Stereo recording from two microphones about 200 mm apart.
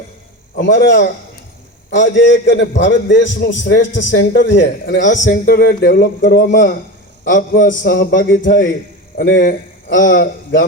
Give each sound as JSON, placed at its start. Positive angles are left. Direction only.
{"t": 0.5, "sound": "a man's voice", "side_deg": 60}
{"t": 5.2, "sound": "a man's voice", "side_deg": 50}